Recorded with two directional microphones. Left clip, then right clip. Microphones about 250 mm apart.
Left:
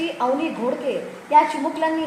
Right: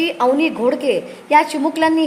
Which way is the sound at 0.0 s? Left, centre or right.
Right.